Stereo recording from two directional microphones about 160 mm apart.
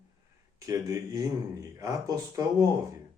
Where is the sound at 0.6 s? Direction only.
20° right (ahead or behind).